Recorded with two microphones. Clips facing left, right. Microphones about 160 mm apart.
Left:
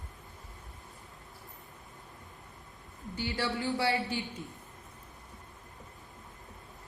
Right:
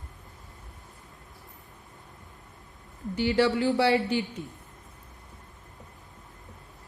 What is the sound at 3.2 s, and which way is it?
Speech, 80° right.